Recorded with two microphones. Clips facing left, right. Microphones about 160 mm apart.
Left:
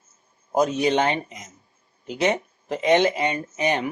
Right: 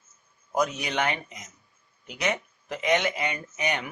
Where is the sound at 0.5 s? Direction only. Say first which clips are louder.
Left 7 dB; 30° left (ahead or behind).